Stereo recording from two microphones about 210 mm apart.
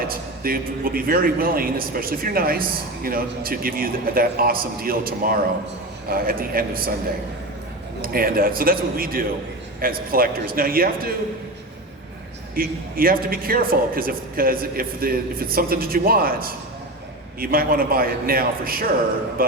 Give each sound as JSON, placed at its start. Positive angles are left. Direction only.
{"t": 0.1, "sound": "a man's voice", "side_deg": -45}
{"t": 8.0, "sound": "a man's voice", "side_deg": -45}
{"t": 12.5, "sound": "a man's voice", "side_deg": -45}